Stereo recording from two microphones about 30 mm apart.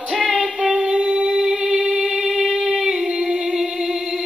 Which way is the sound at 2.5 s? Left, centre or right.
Centre.